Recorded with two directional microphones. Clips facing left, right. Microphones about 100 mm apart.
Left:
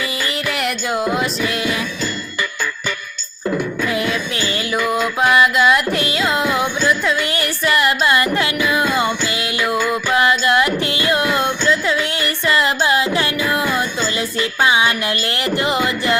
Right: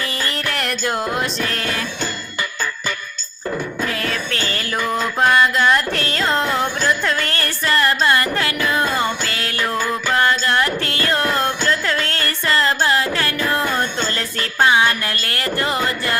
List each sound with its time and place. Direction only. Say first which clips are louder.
0.0 s music: left 2 dB; 5° left (ahead or behind)
3.8 s music: left 4 dB; 15° left (ahead or behind)
4.8 s carnatic music: even; 5° left (ahead or behind)
6.8 s a sound: left 2 dB; 5° left (ahead or behind)
7.8 s carnatic music: even; 15° left (ahead or behind)
9.6 s music: left 2 dB; 15° left (ahead or behind)